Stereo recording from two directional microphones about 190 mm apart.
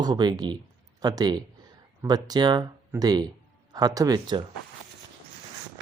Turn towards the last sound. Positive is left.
turn(degrees=-20)  # may be behind; listen again after turning